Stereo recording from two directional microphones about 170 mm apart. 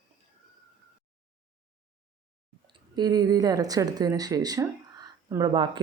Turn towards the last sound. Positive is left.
turn(degrees=-25)  # may be behind; listen again after turning